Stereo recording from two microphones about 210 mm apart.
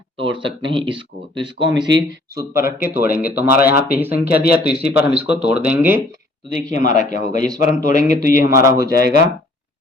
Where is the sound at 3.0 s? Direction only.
45° left (ahead or behind).